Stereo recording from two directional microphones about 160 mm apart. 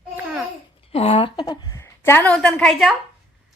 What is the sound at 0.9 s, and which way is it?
A woman's voice, 35° left (ahead or behind).